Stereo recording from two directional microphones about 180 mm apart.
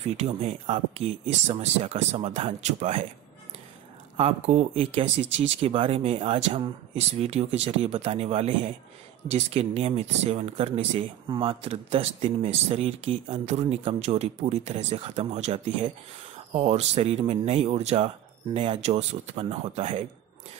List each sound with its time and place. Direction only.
0.0 s speech: 35° right (ahead or behind)
4.2 s speech: 35° right (ahead or behind)